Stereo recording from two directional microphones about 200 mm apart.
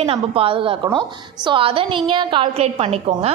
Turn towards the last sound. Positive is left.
turn(degrees=-30)  # may be behind; listen again after turning